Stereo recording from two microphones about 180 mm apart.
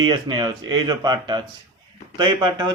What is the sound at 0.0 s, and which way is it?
A man's voice, 25° right (ahead or behind).